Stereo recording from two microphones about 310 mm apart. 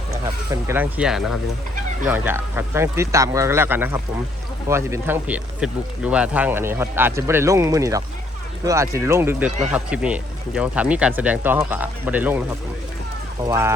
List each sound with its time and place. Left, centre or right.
0.1 s speech: centre